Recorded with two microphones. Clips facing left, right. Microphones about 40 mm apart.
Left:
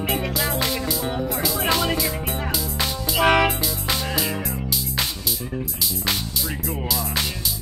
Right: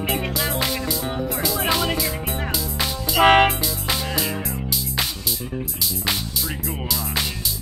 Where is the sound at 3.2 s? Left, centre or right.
Right.